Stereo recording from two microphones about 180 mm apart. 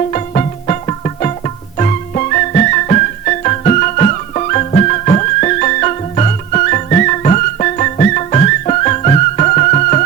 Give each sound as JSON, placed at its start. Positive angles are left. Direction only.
{"t": 0.1, "sound": "music", "side_deg": 40}